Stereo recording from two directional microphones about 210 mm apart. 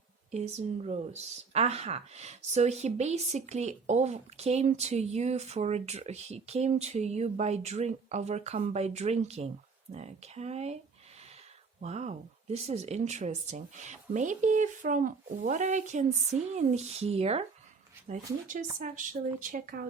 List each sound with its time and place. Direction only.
0.3 s speech: 30° right (ahead or behind)
11.8 s speech: 30° right (ahead or behind)
18.8 s speech: 40° right (ahead or behind)